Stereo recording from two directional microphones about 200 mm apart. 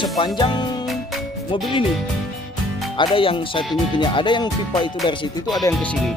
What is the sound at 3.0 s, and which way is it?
Speech, 25° left (ahead or behind).